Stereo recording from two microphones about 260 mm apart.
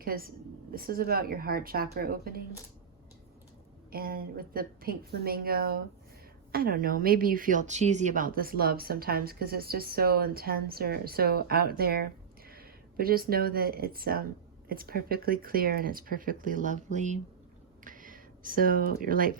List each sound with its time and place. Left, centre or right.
0.0 s speech: right
3.9 s speech: right